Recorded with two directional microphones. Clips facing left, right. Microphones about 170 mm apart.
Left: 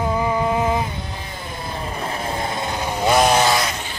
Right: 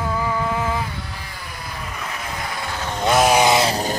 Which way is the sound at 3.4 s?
25° right (ahead or behind).